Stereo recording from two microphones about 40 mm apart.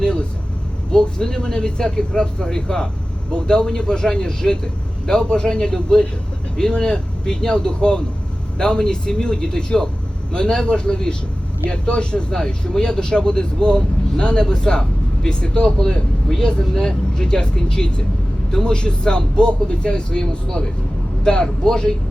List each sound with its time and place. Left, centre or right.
0.0 s vehicle: left
0.9 s a man's voice: left